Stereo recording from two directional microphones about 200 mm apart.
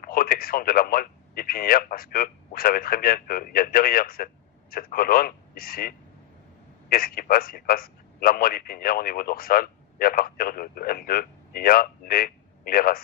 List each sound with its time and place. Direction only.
0.0 s a man's voice: 45° left (ahead or behind)